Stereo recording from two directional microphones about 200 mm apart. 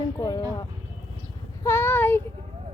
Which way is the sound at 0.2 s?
20° left (ahead or behind).